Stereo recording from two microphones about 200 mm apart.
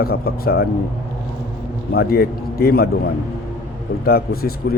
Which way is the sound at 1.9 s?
50° left (ahead or behind).